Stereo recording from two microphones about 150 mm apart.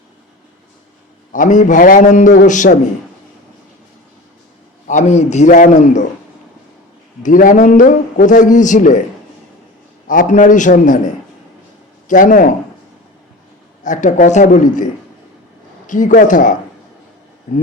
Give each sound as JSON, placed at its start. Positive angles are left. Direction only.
{"t": 1.3, "sound": "a man's voice", "side_deg": 60}
{"t": 4.9, "sound": "a man's voice", "side_deg": 50}
{"t": 7.2, "sound": "a man's voice", "side_deg": 60}
{"t": 10.1, "sound": "a man's voice", "side_deg": 60}
{"t": 13.8, "sound": "a man's voice", "side_deg": 60}
{"t": 15.9, "sound": "a man's voice", "side_deg": 60}